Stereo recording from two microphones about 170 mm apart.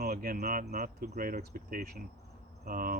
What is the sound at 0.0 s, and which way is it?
Speech, 60° right (ahead or behind).